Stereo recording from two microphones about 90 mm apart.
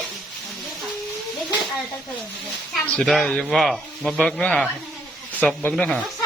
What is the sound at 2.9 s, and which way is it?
Speech, 5° left (ahead or behind).